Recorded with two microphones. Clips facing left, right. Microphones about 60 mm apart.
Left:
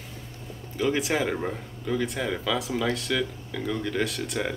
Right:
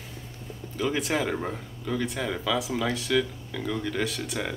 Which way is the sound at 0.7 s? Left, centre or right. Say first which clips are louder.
Left 2 dB; centre.